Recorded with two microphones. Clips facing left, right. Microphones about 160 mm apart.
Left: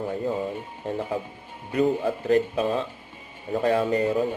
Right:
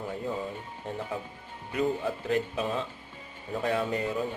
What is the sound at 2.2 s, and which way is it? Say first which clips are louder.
Speech: left 8 dB; 45° left (ahead or behind).